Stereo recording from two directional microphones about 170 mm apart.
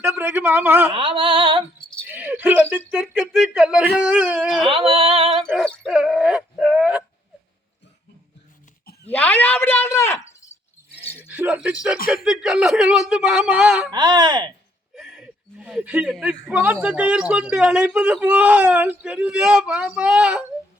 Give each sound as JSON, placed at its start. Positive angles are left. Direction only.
{"t": 0.2, "sound": "a man's voice", "side_deg": -10}
{"t": 0.9, "sound": "a sound", "side_deg": -30}
{"t": 2.0, "sound": "a sound", "side_deg": -10}
{"t": 3.2, "sound": "a man's voice", "side_deg": 0}
{"t": 4.7, "sound": "a sound", "side_deg": -30}
{"t": 5.5, "sound": "dog", "side_deg": 0}
{"t": 9.0, "sound": "speech", "side_deg": 10}
{"t": 11.2, "sound": "a man's voice", "side_deg": -10}
{"t": 13.9, "sound": "speech", "side_deg": -25}
{"t": 14.9, "sound": "a man's voice", "side_deg": -5}